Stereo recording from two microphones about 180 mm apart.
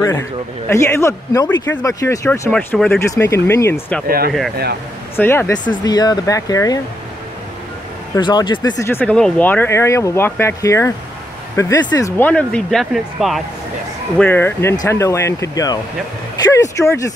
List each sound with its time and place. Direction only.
0.0 s speech: 15° left (ahead or behind)
2.5 s speech: 5° left (ahead or behind)
3.0 s speech: 15° left (ahead or behind)
5.1 s speech: 10° left (ahead or behind)
5.9 s speech: 20° left (ahead or behind)
8.2 s speech: 25° left (ahead or behind)